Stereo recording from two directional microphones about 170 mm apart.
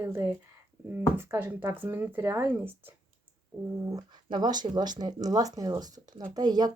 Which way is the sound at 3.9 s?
25° right (ahead or behind).